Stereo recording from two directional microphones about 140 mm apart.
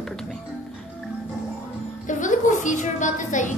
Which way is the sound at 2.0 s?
65° left (ahead or behind).